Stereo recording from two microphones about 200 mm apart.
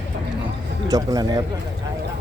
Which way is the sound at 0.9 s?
20° right (ahead or behind).